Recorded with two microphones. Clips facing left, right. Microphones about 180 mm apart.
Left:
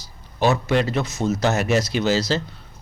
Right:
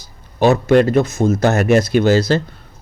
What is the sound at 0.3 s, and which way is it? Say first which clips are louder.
A man's voice: right 7 dB; 50° right (ahead or behind).